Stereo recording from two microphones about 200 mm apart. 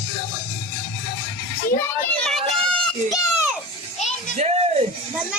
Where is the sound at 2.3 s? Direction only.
Centre (ahead or behind).